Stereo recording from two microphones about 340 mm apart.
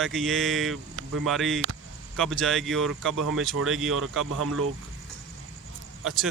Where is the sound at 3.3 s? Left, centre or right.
Right.